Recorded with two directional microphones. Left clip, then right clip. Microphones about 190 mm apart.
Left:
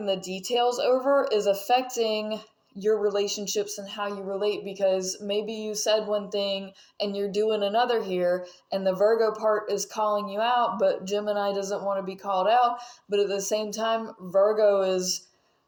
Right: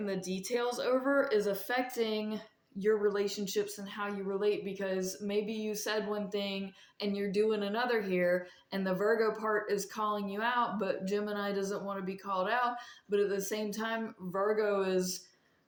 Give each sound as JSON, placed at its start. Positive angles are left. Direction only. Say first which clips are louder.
{"t": 0.4, "sound": "speech", "louder": "left 10 dB", "side_deg": 45}
{"t": 1.2, "sound": "speech", "louder": "left 6 dB", "side_deg": -15}